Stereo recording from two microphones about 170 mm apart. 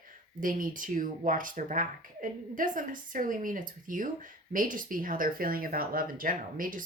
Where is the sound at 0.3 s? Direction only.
55° right (ahead or behind).